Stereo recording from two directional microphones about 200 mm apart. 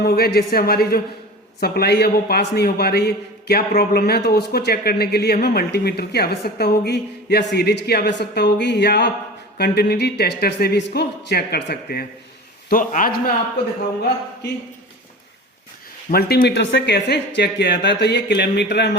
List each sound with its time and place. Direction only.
0.0 s a man's voice: 50° left (ahead or behind)
16.1 s speech: 50° left (ahead or behind)